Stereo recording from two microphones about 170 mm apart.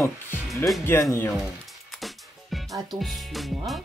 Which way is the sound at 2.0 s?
Centre (ahead or behind).